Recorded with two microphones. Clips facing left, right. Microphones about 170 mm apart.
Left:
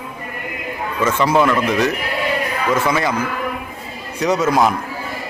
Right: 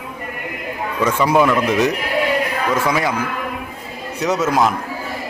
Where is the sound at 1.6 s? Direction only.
20° right (ahead or behind).